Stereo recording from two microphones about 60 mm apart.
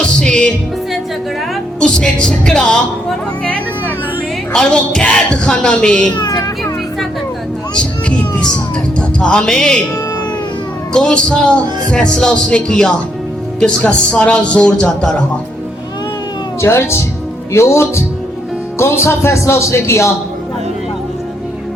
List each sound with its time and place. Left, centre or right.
0.2 s music: centre
1.8 s speech: centre
4.5 s speech: centre
7.8 s music: centre
10.9 s speech: centre
16.6 s speech: left